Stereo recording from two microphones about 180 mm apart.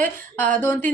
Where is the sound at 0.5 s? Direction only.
10° left (ahead or behind).